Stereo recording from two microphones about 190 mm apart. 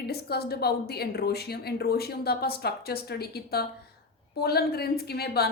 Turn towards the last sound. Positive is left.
turn(degrees=55)  # may be behind; listen again after turning